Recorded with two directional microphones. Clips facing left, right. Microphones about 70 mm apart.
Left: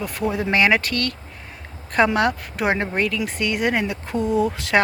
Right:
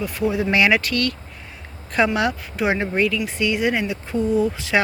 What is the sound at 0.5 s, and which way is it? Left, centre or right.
Speech, left.